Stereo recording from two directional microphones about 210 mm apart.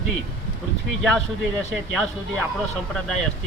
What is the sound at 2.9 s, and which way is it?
Speech, centre (ahead or behind).